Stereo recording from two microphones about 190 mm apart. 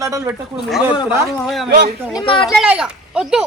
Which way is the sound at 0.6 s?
Centre (ahead or behind).